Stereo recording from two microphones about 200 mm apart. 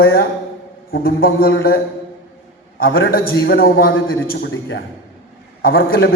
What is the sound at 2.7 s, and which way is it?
A man's voice, 50° left (ahead or behind).